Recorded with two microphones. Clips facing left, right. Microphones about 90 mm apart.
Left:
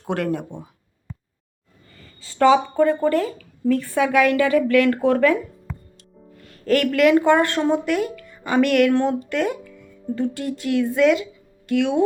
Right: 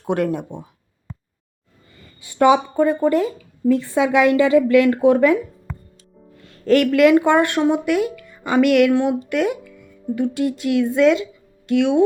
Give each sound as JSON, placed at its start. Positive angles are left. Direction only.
{"t": 0.0, "sound": "a woman's voice", "side_deg": -20}
{"t": 2.2, "sound": "a woman's voice", "side_deg": -15}